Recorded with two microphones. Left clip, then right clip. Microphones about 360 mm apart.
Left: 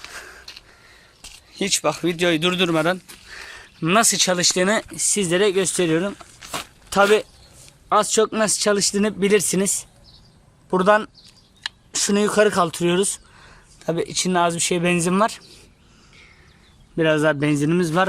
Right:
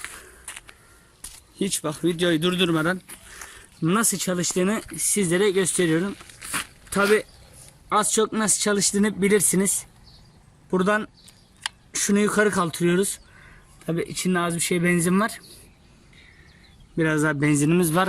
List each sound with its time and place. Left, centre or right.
0.0 s a sound: centre
1.2 s speech: centre
17.0 s speech: centre